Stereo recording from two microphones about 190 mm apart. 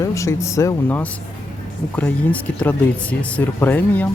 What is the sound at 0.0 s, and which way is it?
Speech, 15° left (ahead or behind).